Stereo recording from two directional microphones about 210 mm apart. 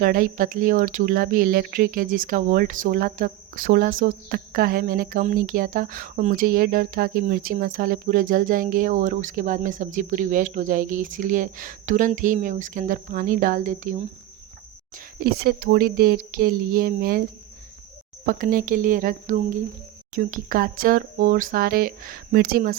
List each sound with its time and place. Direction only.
0.0 s speech: 40° right (ahead or behind)
18.3 s speech: 40° right (ahead or behind)